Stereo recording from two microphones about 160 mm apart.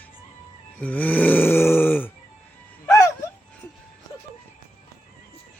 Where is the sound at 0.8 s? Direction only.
10° left (ahead or behind).